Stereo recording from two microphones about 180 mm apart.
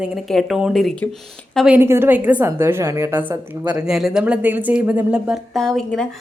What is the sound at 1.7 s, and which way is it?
A woman's voice, 15° right (ahead or behind).